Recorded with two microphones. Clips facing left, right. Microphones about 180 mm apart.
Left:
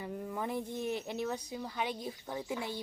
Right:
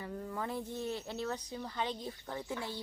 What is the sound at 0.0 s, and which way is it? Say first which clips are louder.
Speech: left 2 dB; 15° left (ahead or behind).